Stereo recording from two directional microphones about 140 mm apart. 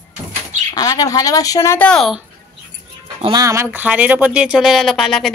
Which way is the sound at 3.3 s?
25° right (ahead or behind).